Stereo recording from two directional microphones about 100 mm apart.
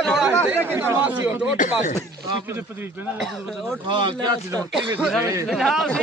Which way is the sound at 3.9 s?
55° right (ahead or behind).